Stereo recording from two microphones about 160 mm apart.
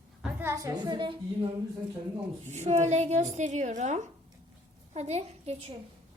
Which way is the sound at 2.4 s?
45° right (ahead or behind).